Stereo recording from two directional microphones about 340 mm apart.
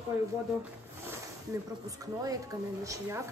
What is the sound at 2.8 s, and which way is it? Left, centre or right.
Speech, centre.